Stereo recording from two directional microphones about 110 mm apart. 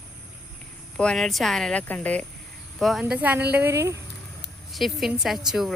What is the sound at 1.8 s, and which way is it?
Speech, 15° left (ahead or behind).